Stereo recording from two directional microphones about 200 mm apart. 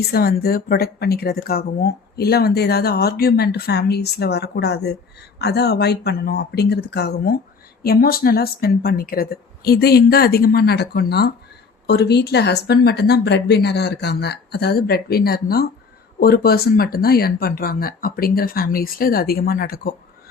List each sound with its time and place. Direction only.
0.1 s speech: 50° left (ahead or behind)